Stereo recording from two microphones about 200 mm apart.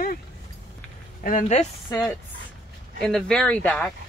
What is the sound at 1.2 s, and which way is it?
Speech, 40° left (ahead or behind).